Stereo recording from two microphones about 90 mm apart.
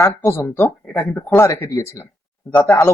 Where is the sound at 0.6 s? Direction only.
5° left (ahead or behind).